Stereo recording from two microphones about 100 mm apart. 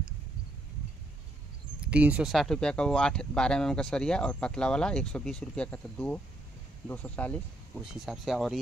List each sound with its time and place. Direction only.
1.8 s speech: 15° right (ahead or behind)
2.3 s speech: 5° left (ahead or behind)
7.7 s speech: 5° right (ahead or behind)